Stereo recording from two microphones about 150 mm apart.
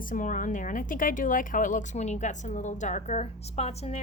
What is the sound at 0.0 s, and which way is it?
A woman's voice, 65° left (ahead or behind).